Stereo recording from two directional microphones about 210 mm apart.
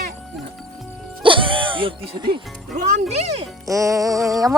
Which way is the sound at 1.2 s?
25° right (ahead or behind).